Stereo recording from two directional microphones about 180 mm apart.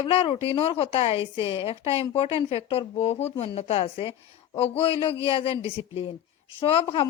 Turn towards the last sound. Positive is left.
turn(degrees=35)  # may be behind; listen again after turning